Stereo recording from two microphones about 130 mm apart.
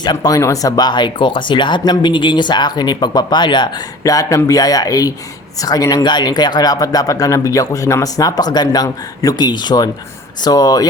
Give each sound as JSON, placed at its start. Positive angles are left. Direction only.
{"t": 0.0, "sound": "speech", "side_deg": 30}